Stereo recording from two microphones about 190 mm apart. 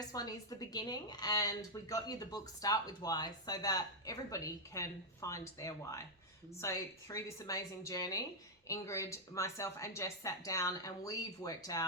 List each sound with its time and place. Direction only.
0.1 s a woman's voice: 20° left (ahead or behind)